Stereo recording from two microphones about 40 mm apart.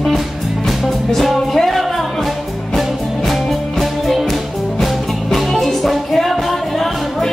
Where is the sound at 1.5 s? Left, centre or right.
Centre.